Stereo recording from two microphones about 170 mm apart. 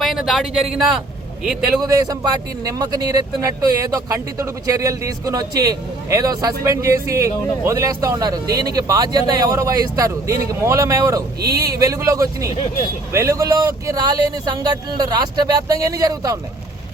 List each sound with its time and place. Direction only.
0.0 s speech: centre (ahead or behind)
1.8 s speech: 20° right (ahead or behind)